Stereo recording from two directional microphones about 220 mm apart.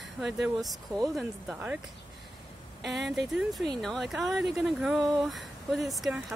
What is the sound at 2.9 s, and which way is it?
Speech, centre (ahead or behind).